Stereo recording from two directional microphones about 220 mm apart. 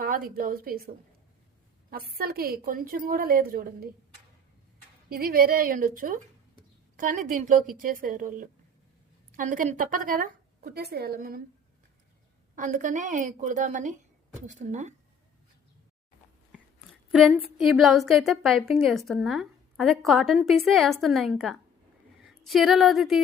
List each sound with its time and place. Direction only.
0.0 s a woman's voice: 40° right (ahead or behind)
5.0 s a woman's voice: 40° right (ahead or behind)
12.5 s a woman's voice: 35° right (ahead or behind)
17.1 s a woman's voice: centre (ahead or behind)